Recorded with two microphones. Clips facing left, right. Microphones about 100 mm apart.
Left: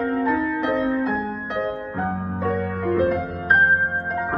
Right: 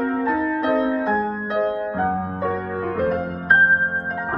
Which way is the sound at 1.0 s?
35° right (ahead or behind).